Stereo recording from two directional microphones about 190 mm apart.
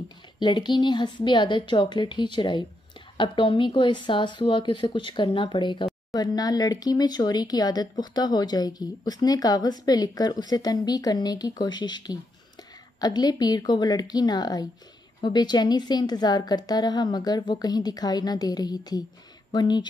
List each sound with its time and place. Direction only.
0.4 s speech: 25° left (ahead or behind)